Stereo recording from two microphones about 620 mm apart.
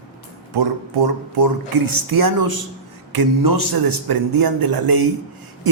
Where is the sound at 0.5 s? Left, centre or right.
Right.